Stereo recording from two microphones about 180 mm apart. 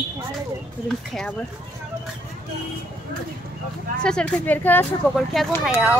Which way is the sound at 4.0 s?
5° left (ahead or behind).